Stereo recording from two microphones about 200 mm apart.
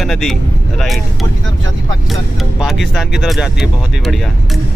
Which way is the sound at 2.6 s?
Centre (ahead or behind).